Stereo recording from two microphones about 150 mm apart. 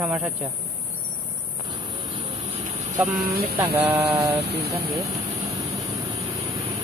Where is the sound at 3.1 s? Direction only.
80° right.